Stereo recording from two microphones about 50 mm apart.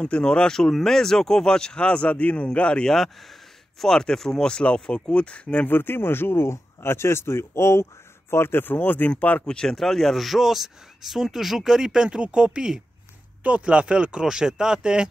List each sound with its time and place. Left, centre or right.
0.0 s speech: centre
3.8 s speech: centre
5.7 s speech: left
9.5 s speech: centre
9.8 s speech: centre